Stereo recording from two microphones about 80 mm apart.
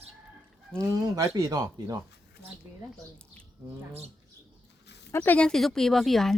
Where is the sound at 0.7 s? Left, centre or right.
Right.